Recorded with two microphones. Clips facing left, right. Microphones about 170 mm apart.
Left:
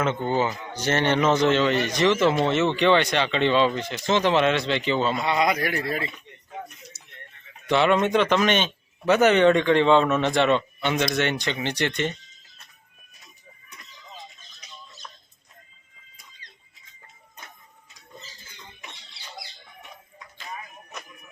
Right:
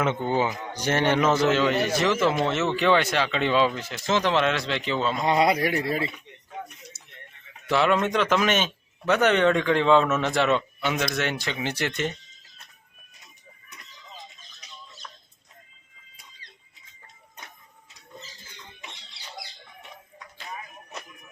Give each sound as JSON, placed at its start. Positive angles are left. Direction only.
{"t": 0.0, "sound": "a man's voice", "side_deg": -15}
{"t": 5.2, "sound": "speech", "side_deg": -35}
{"t": 7.7, "sound": "a man's voice", "side_deg": 0}